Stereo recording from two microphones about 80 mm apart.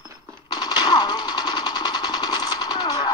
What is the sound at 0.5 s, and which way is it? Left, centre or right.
Machine gun, left.